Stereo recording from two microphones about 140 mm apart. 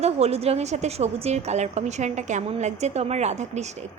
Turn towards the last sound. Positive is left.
turn(degrees=-55)  # may be behind; listen again after turning